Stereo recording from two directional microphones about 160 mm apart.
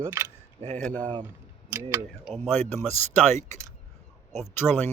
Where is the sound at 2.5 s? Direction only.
45° right (ahead or behind).